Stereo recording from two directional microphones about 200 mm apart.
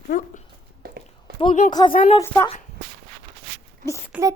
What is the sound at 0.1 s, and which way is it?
Dog, 40° left (ahead or behind).